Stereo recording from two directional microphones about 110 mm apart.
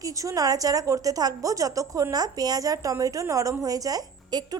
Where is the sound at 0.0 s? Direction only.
30° right (ahead or behind).